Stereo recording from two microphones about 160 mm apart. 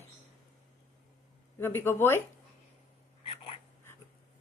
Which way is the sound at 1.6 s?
15° left (ahead or behind).